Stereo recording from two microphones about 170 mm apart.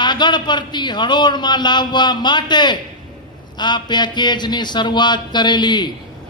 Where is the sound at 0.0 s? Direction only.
25° left (ahead or behind).